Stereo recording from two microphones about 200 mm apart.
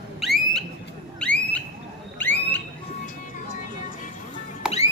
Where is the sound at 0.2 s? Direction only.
Centre (ahead or behind).